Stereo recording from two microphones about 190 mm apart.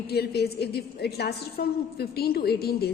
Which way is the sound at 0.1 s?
55° left (ahead or behind).